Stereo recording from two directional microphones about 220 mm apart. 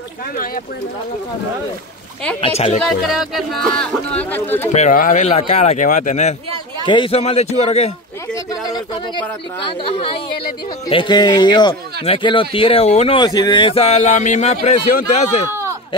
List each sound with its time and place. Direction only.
2.4 s speech: 25° left (ahead or behind)
2.8 s speech: centre (ahead or behind)
4.7 s speech: 35° left (ahead or behind)
8.5 s speech: 15° left (ahead or behind); by 15.2 s 35° left (ahead or behind)